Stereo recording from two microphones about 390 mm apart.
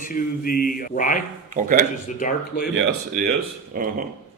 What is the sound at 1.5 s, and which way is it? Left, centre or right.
Speech, right.